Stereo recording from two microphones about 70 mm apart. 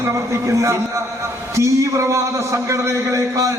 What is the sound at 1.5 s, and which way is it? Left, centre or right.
A man's voice, right.